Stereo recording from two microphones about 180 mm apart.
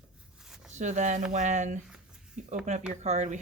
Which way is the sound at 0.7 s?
40° right (ahead or behind).